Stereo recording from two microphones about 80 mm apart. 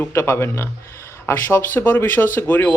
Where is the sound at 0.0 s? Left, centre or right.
Left.